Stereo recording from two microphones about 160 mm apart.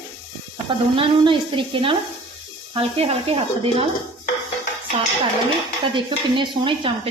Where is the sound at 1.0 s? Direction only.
30° right (ahead or behind).